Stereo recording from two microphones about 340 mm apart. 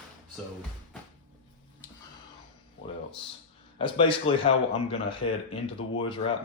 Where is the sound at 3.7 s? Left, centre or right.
Centre.